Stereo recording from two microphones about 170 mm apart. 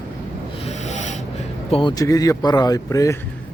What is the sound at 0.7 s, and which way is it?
Snoring, 40° left (ahead or behind).